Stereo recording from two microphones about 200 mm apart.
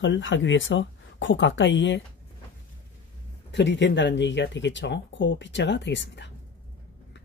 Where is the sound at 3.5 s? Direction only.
60° left (ahead or behind).